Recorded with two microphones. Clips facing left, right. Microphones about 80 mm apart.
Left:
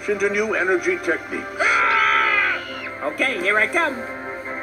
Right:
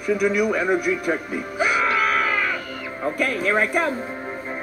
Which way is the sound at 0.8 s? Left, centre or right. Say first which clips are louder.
Left 1 dB; left.